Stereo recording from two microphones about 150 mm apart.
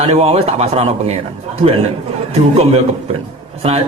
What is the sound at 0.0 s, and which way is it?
A man's voice, 40° right (ahead or behind).